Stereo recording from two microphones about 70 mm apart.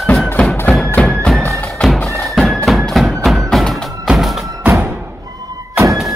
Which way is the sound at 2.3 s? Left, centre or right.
Centre.